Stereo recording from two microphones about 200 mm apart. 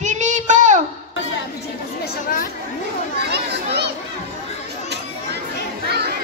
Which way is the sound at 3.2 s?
55° right (ahead or behind).